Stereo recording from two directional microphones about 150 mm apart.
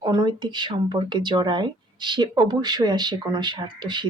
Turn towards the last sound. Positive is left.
turn(degrees=-30)  # may be behind; listen again after turning